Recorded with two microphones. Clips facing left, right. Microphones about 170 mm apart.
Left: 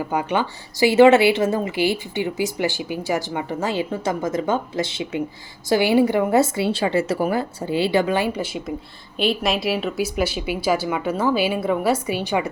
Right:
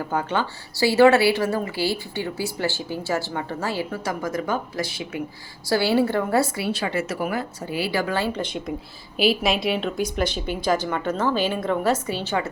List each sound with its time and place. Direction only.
0.0 s speech: 15° left (ahead or behind)